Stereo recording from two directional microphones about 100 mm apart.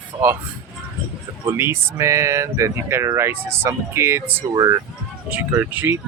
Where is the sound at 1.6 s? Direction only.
25° right (ahead or behind).